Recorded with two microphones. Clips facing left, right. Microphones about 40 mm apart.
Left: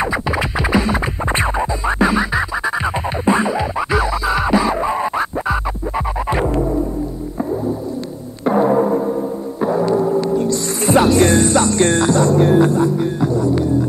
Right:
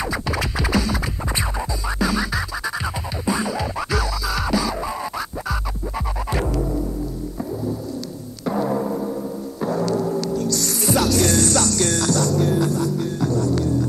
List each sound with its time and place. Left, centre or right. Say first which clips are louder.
0.0 s music: left 5 dB; left
8.5 s gong: left 8 dB; left